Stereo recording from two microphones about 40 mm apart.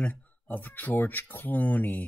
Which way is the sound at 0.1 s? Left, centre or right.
Left.